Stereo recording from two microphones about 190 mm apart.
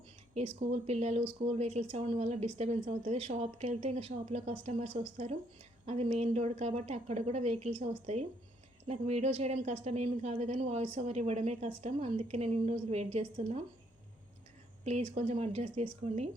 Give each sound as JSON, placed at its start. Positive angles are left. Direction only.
{"t": 0.4, "sound": "a woman's voice", "side_deg": -35}
{"t": 14.8, "sound": "a woman's voice", "side_deg": -35}